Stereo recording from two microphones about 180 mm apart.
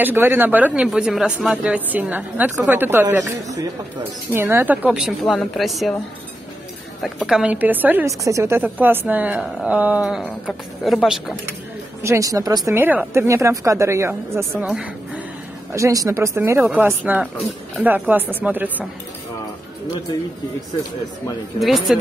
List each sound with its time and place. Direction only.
0.0 s a woman's voice: 10° right (ahead or behind)
7.0 s a woman's voice: centre (ahead or behind)
12.0 s speech: 15° right (ahead or behind)
15.7 s speech: 20° right (ahead or behind)
21.5 s a woman's voice: centre (ahead or behind)